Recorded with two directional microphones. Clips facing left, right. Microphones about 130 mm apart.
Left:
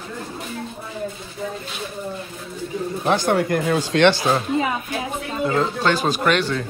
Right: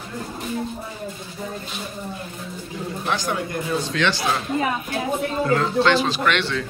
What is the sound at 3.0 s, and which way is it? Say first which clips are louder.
Speech: left 7 dB; 50° left (ahead or behind).